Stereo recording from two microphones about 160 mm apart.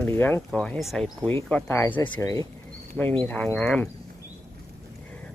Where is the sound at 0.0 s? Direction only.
10° left (ahead or behind).